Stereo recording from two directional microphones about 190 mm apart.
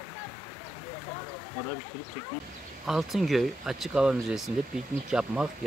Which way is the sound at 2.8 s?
Centre (ahead or behind).